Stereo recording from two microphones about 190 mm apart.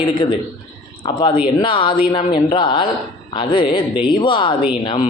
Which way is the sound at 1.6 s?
25° left (ahead or behind).